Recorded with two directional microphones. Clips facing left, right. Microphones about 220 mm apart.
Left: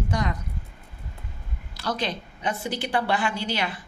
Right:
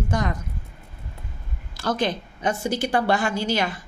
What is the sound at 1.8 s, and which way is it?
A woman's voice, 50° right (ahead or behind).